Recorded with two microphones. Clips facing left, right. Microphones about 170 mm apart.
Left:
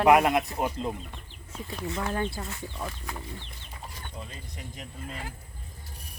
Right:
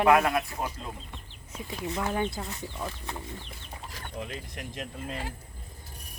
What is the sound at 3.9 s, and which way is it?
Speech, 90° right.